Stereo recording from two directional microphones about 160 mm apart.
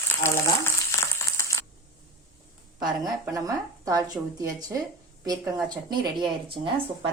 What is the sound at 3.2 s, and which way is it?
Speech, 20° right (ahead or behind).